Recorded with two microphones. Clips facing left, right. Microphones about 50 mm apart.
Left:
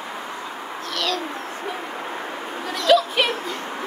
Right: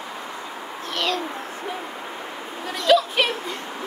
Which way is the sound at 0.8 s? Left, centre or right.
Right.